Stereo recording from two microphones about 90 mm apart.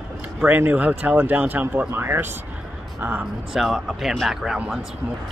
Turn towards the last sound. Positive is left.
turn(degrees=-5)  # may be behind; listen again after turning